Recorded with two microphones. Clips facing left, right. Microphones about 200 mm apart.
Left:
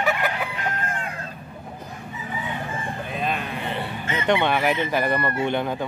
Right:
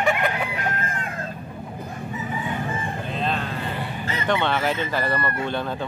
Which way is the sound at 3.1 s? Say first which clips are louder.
Right 1 dB; 10° left (ahead or behind).